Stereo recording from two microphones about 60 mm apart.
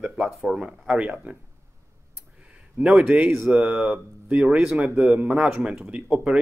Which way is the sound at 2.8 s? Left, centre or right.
Centre.